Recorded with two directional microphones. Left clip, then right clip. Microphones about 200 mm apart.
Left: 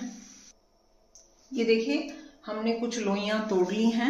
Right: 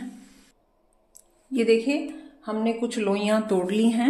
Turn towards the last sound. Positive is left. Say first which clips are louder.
# right 3 dB
turn(degrees=-55)  # may be behind; listen again after turning